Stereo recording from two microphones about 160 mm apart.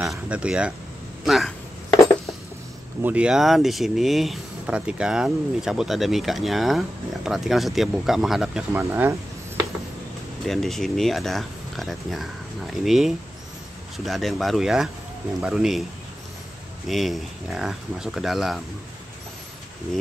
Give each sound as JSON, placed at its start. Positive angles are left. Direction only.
{"t": 0.1, "sound": "speech", "side_deg": -5}
{"t": 3.0, "sound": "speech", "side_deg": -10}
{"t": 10.4, "sound": "speech", "side_deg": 0}
{"t": 16.8, "sound": "speech", "side_deg": 0}